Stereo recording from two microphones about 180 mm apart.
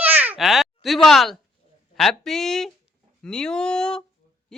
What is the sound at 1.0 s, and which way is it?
Speech, centre (ahead or behind).